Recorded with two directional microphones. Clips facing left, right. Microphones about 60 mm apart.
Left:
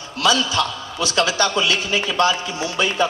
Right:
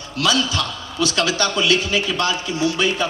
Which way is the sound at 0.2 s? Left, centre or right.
Left.